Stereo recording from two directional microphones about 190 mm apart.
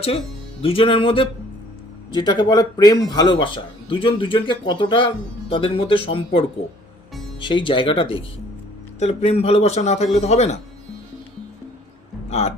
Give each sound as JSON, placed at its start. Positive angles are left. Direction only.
{"t": 0.6, "sound": "a man's voice", "side_deg": 30}
{"t": 12.3, "sound": "speech", "side_deg": 35}